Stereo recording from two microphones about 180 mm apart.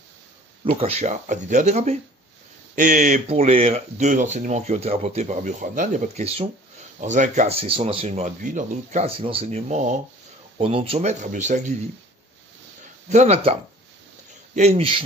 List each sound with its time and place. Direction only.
0.7 s speech: 35° right (ahead or behind)
13.1 s speech: 40° right (ahead or behind)